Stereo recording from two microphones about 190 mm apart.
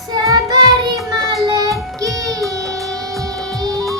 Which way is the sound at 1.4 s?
20° right (ahead or behind).